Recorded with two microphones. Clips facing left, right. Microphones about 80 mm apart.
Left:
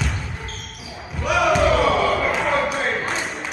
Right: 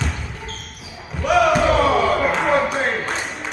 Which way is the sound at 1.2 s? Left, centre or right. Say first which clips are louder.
Right 2 dB; centre.